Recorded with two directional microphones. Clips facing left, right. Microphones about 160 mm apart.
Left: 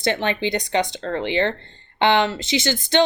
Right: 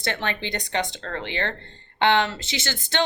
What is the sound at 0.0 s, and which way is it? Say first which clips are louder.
Speech: left 7 dB; 20° left (ahead or behind).